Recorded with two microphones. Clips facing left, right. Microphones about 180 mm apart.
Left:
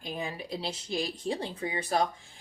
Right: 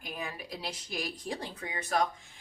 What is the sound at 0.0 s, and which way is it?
Speech, 25° left (ahead or behind).